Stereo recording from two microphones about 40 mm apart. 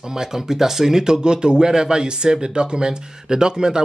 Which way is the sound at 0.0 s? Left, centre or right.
Centre.